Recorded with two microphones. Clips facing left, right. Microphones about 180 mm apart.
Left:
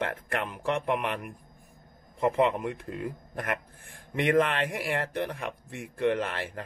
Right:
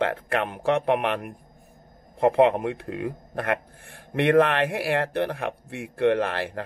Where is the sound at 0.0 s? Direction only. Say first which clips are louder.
Right 6 dB; 65° right (ahead or behind).